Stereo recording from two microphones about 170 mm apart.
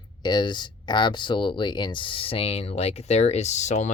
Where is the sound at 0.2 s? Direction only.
25° left (ahead or behind).